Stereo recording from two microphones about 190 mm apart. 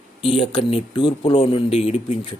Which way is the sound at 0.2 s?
30° left (ahead or behind).